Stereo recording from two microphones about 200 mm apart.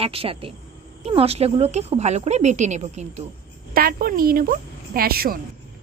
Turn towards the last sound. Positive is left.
turn(degrees=-50)  # may be behind; listen again after turning